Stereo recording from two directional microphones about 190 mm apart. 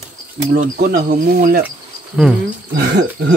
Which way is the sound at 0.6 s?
45° right (ahead or behind).